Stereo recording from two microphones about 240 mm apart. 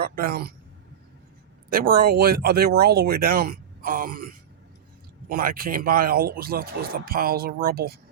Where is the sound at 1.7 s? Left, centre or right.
Right.